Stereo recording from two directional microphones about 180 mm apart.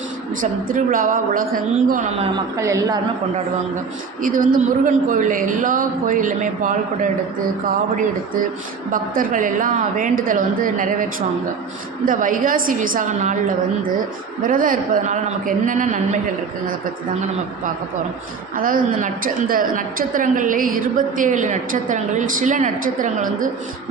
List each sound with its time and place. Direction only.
0.4 s a woman's voice: 50° right (ahead or behind)
2.6 s a woman's voice: 20° right (ahead or behind)
4.2 s a woman's voice: 50° right (ahead or behind)
12.0 s a woman's voice: 50° right (ahead or behind)
14.4 s a woman's voice: 50° right (ahead or behind)
18.5 s a woman's voice: 50° right (ahead or behind)